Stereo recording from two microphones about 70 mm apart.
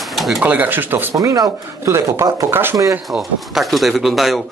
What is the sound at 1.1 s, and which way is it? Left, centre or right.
Speech, right.